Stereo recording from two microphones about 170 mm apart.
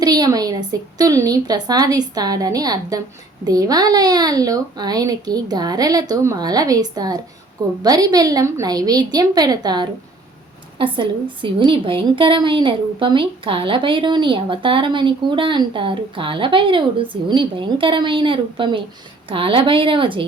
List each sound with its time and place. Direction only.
0.0 s a woman's voice: 25° right (ahead or behind)